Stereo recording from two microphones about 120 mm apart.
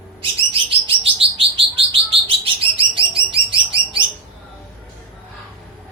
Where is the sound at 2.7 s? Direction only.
45° right (ahead or behind).